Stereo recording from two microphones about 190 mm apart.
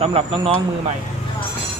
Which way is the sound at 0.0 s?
30° right (ahead or behind).